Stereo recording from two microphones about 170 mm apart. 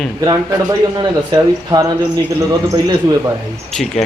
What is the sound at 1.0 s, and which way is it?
Speech, 20° right (ahead or behind).